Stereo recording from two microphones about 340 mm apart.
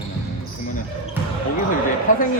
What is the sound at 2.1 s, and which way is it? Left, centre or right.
Speech, left.